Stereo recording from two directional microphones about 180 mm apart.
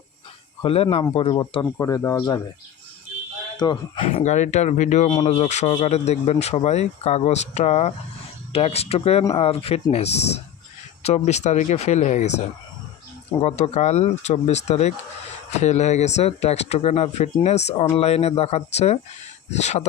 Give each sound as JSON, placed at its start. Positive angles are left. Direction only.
{"t": 0.6, "sound": "speech", "side_deg": 35}
{"t": 3.6, "sound": "speech", "side_deg": 25}
{"t": 5.0, "sound": "speech", "side_deg": 25}
{"t": 5.4, "sound": "speech", "side_deg": 40}
{"t": 13.4, "sound": "speech", "side_deg": 40}